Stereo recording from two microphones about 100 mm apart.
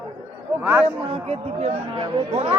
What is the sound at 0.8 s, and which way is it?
Speech, 65° right (ahead or behind).